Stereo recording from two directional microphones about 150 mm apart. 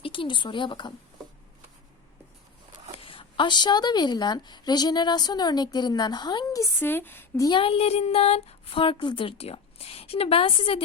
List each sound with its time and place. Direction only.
0.0 s speech: 35° left (ahead or behind)
3.0 s a woman's voice: 35° left (ahead or behind)
6.7 s a woman's voice: 15° left (ahead or behind)
7.4 s speech: 35° left (ahead or behind)